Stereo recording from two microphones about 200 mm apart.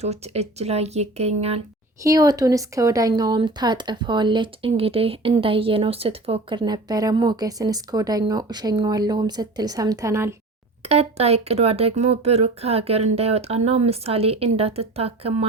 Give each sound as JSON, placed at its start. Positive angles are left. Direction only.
{"t": 0.0, "sound": "speech", "side_deg": -30}
{"t": 2.0, "sound": "speech", "side_deg": -20}
{"t": 10.8, "sound": "speech", "side_deg": -30}